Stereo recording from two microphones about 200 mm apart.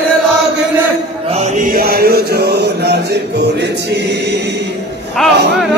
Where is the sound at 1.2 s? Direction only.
35° right (ahead or behind); by 4.4 s 60° right (ahead or behind).